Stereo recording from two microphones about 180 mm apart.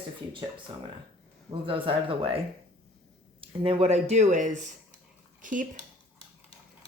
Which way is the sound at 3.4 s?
30° right (ahead or behind).